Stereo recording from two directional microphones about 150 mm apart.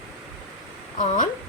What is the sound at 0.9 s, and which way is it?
Speech, 60° left (ahead or behind).